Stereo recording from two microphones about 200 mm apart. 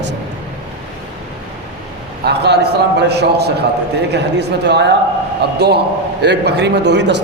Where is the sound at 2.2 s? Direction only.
55° right (ahead or behind).